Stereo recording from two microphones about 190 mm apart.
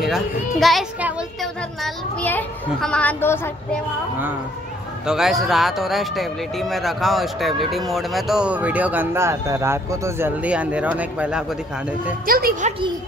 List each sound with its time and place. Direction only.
0.0 s speech: centre (ahead or behind)
5.0 s speech: centre (ahead or behind)
12.3 s speech: 50° right (ahead or behind)